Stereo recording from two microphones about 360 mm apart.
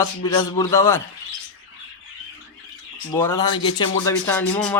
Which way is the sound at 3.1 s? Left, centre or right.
Centre.